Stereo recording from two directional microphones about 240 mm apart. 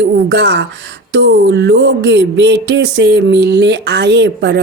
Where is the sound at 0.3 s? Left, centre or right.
Right.